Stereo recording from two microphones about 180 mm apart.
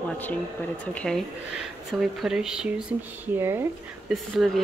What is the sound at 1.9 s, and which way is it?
A woman's voice, centre (ahead or behind).